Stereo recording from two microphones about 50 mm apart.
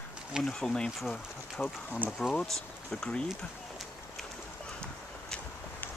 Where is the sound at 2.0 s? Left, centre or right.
Centre.